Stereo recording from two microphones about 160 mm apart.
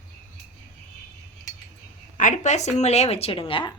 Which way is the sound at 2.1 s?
50° left (ahead or behind).